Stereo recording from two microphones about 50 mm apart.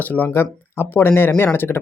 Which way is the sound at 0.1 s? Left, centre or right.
Left.